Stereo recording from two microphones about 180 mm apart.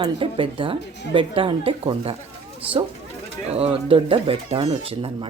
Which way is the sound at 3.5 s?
30° right (ahead or behind).